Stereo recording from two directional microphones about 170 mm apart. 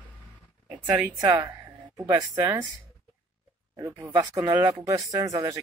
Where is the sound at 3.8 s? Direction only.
20° right (ahead or behind).